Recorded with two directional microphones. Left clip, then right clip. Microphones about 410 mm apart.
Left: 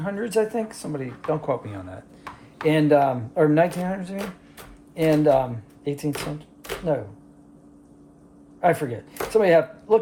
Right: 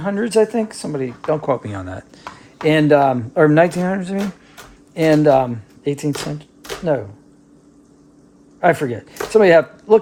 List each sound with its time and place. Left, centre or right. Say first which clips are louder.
0.0 s speech: right 7 dB; right
8.6 s speech: right 5 dB; right